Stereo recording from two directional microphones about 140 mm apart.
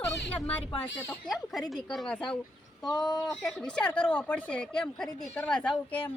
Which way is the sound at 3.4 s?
5° left (ahead or behind).